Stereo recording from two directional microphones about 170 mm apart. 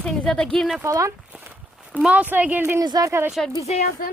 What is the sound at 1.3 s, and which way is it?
Walk, 5° right (ahead or behind).